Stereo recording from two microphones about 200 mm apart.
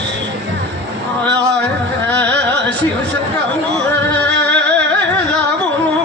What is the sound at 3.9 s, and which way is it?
Music, 60° right (ahead or behind).